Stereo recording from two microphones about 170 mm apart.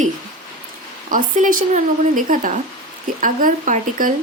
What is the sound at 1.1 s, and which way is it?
A woman's voice, 50° right (ahead or behind).